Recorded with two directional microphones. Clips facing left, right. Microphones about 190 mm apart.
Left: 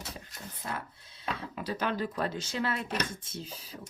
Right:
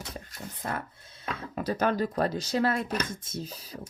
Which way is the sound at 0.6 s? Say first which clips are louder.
Right 4 dB; 50° right (ahead or behind).